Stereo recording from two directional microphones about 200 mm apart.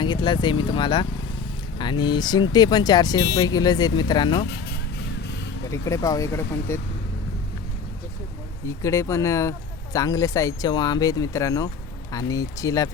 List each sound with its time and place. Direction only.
0.0 s speech: 20° left (ahead or behind)
5.7 s speech: 15° left (ahead or behind)
8.6 s speech: 15° left (ahead or behind)